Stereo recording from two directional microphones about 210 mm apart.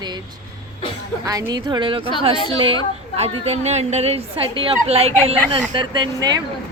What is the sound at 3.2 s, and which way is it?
Speech, 30° right (ahead or behind).